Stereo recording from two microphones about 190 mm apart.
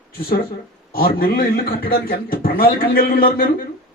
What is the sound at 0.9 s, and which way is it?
Speech, 50° left (ahead or behind).